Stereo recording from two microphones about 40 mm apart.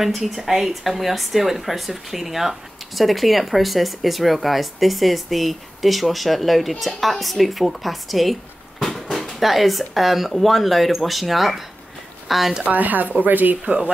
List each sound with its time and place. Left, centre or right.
0.2 s speech: centre
8.7 s a sound: centre
9.4 s speech: centre
12.6 s speech: right